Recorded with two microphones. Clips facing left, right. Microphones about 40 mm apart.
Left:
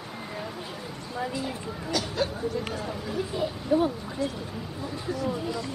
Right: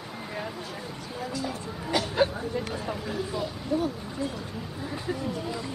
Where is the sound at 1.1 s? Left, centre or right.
Left.